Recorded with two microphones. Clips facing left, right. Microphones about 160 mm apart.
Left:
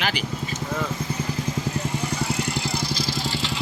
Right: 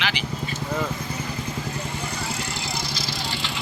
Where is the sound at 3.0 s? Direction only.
50° left (ahead or behind).